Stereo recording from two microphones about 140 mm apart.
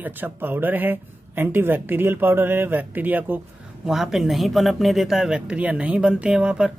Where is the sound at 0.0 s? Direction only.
15° right (ahead or behind).